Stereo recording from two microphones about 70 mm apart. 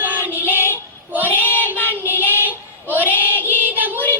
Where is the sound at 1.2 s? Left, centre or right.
Left.